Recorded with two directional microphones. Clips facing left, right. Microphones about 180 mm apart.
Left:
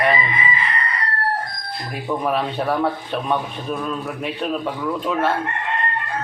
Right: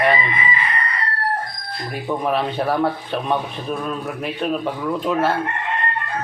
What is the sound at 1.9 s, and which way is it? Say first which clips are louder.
Speech: right 1 dB; centre (ahead or behind).